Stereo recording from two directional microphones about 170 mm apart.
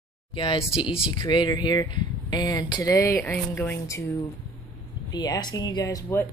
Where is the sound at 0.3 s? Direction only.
30° left (ahead or behind).